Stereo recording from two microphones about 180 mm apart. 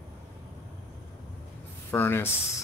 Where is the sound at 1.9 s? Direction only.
10° left (ahead or behind).